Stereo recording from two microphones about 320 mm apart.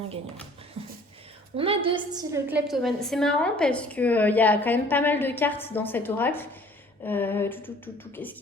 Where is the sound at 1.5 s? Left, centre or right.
Centre.